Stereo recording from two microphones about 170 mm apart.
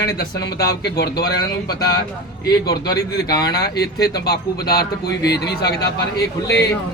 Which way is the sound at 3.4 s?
70° left (ahead or behind).